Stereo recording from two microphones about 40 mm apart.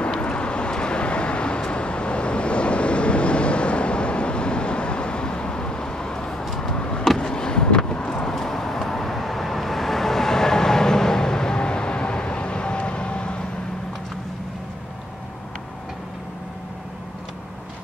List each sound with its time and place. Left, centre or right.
0.2 s vehicle: left